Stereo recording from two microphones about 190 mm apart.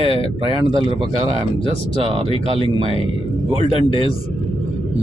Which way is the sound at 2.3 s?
30° left (ahead or behind).